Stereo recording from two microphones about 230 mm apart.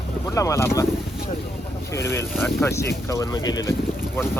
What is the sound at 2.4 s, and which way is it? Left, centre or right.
Speech, centre.